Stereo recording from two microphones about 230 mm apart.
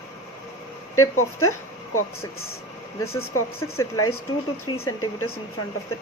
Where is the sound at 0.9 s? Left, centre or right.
Left.